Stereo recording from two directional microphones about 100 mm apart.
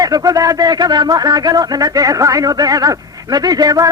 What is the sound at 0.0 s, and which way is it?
A man's voice, 40° right (ahead or behind).